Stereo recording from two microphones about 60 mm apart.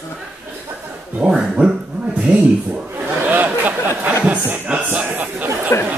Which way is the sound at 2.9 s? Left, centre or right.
Right.